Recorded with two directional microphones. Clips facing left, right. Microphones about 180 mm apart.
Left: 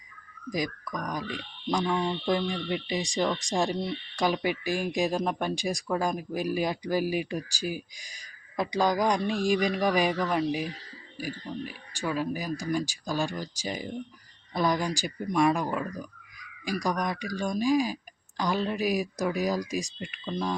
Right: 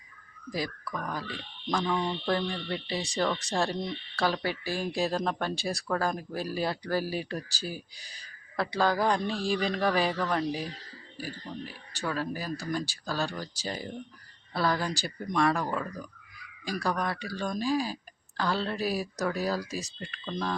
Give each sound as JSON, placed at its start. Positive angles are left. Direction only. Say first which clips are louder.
{"t": 0.5, "sound": "speech", "louder": "left 2 dB", "side_deg": 15}